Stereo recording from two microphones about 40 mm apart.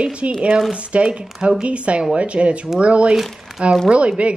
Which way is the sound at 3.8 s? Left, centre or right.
Right.